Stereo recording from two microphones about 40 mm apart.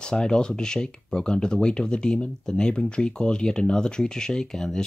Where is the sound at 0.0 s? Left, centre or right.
Centre.